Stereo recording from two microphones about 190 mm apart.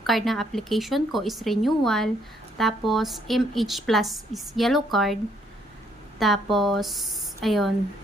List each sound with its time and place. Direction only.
0.0 s a woman's voice: centre (ahead or behind)
6.1 s a woman's voice: centre (ahead or behind)